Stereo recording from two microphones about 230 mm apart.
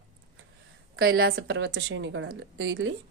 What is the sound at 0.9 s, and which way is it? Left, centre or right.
Speech, right.